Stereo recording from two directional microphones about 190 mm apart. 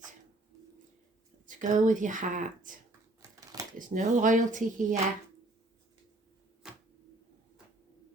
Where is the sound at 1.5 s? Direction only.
40° right (ahead or behind).